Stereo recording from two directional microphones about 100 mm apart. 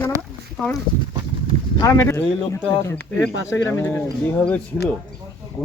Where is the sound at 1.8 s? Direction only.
30° left (ahead or behind).